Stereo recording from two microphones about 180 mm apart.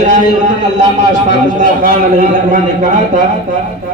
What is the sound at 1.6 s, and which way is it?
A man's voice, 50° right (ahead or behind).